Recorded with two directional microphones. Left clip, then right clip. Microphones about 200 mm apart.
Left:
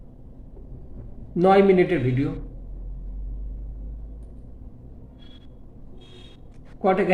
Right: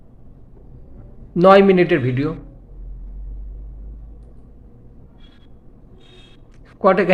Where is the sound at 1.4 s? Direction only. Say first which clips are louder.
Right 6 dB; 45° right (ahead or behind).